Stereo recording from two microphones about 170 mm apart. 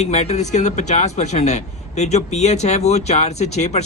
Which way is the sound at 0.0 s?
40° left (ahead or behind).